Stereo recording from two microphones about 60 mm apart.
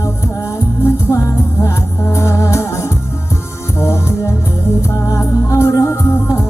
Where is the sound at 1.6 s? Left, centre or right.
Left.